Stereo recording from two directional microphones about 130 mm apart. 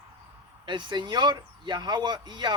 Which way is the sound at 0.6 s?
35° right (ahead or behind).